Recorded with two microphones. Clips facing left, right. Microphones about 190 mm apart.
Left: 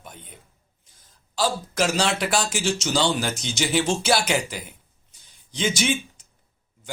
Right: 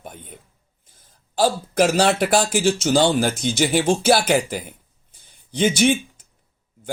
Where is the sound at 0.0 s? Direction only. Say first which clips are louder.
Right 5 dB; 50° right (ahead or behind).